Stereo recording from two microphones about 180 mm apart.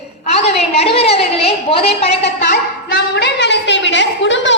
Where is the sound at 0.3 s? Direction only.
35° left (ahead or behind).